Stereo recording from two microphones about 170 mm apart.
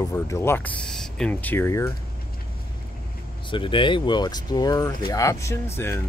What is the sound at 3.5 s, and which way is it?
Speech, 30° left (ahead or behind).